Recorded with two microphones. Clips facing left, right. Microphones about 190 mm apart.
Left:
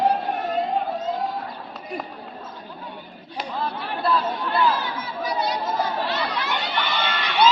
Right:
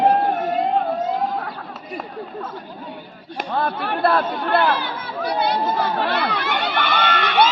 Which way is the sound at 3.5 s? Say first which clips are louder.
Right 6 dB; 60° right (ahead or behind).